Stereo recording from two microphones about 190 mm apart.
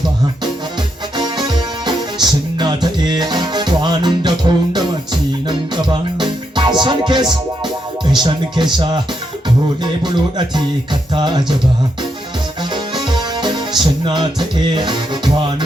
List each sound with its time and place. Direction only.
1.1 s music: 20° right (ahead or behind)
8.1 s speech: 25° right (ahead or behind)
9.8 s music: 25° right (ahead or behind)
12.7 s music: 25° right (ahead or behind)